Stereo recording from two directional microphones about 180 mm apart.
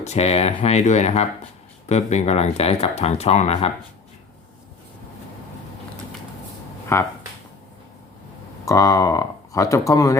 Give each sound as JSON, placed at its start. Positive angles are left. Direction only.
{"t": 0.0, "sound": "speech", "side_deg": 35}
{"t": 6.9, "sound": "speech", "side_deg": 15}
{"t": 8.6, "sound": "speech", "side_deg": 20}